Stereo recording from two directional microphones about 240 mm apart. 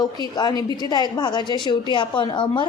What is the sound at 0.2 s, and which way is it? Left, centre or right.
A woman's voice, centre.